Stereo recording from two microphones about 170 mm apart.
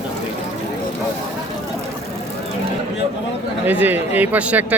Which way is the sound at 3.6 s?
10° right (ahead or behind).